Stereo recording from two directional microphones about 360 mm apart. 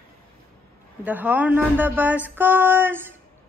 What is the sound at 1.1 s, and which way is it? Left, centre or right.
Speech, centre.